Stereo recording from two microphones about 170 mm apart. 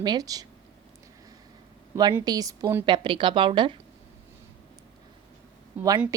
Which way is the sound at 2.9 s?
30° right (ahead or behind).